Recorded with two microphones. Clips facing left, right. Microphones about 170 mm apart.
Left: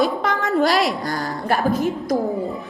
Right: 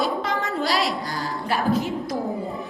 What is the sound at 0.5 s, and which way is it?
A woman's voice, 55° left (ahead or behind).